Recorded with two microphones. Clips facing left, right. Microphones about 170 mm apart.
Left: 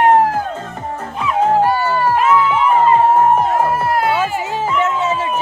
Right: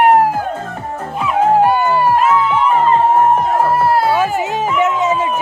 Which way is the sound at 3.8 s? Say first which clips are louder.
Right 3 dB; 30° right (ahead or behind).